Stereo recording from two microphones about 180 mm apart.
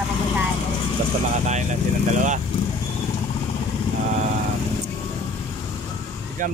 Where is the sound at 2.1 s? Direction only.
45° right (ahead or behind).